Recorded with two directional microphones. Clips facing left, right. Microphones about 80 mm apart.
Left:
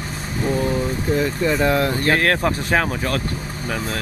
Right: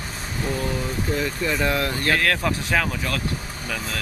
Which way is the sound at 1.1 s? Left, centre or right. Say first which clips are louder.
Left 6 dB; left.